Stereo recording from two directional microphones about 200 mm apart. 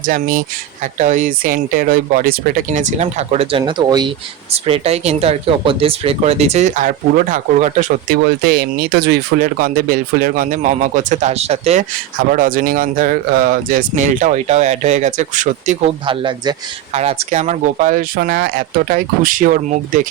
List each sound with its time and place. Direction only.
0.0 s speech: 45° right (ahead or behind)
12.3 s speech: 45° right (ahead or behind)
16.0 s speech: 25° right (ahead or behind); by 20.1 s 40° right (ahead or behind)